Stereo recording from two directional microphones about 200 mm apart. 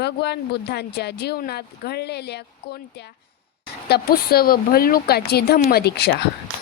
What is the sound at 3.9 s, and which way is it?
Speech, 50° left (ahead or behind).